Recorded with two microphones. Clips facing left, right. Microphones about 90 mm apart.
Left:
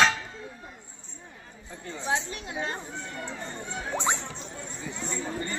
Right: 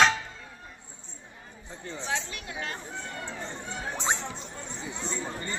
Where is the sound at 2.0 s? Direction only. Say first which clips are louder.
Left 4 dB; 25° left (ahead or behind).